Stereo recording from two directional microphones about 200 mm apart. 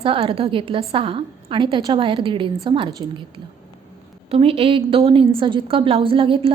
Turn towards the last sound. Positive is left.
turn(degrees=-25)  # may be behind; listen again after turning